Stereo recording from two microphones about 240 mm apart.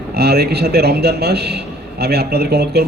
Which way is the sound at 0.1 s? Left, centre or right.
Right.